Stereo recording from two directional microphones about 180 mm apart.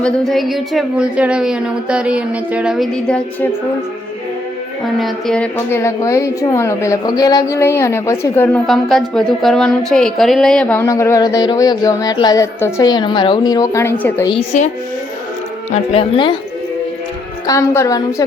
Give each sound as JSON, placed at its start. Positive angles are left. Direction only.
{"t": 0.0, "sound": "speech", "side_deg": 0}
{"t": 4.9, "sound": "speech", "side_deg": 0}
{"t": 5.5, "sound": "a woman's voice", "side_deg": 15}
{"t": 8.6, "sound": "speech", "side_deg": 0}
{"t": 10.8, "sound": "speech", "side_deg": 15}
{"t": 15.7, "sound": "speech", "side_deg": 35}
{"t": 17.4, "sound": "speech", "side_deg": 15}